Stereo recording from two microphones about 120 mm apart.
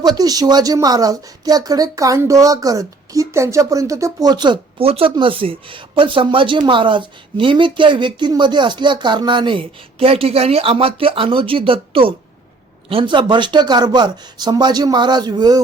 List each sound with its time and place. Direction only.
0.0 s speech: 35° right (ahead or behind)